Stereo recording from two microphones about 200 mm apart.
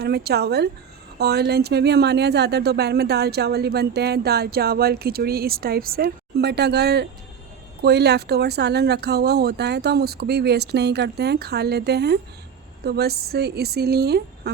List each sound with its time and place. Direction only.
0.0 s speech: 50° right (ahead or behind)